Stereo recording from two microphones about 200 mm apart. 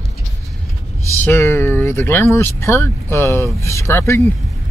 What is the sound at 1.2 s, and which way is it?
Speech, 10° left (ahead or behind).